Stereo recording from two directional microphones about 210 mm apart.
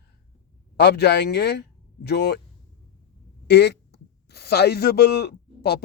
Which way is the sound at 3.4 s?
50° left (ahead or behind).